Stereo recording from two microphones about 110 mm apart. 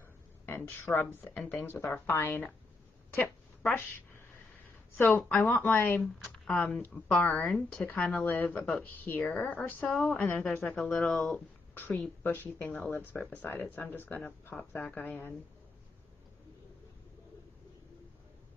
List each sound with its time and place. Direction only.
0.5 s a woman's voice: 20° left (ahead or behind)
5.1 s speech: 20° left (ahead or behind)
9.8 s a woman's voice: 5° left (ahead or behind)
10.1 s speech: 15° left (ahead or behind)